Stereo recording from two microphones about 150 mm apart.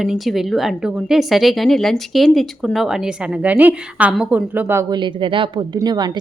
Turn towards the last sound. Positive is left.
turn(degrees=-25)  # may be behind; listen again after turning